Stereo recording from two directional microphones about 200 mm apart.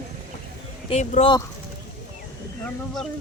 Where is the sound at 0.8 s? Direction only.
30° left (ahead or behind).